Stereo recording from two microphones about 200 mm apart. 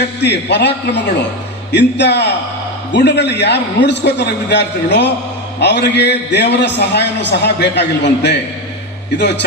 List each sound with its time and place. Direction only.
0.2 s a man's voice: 60° left (ahead or behind)